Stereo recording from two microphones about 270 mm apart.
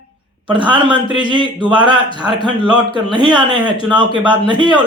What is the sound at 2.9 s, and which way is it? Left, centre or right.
Speech, centre.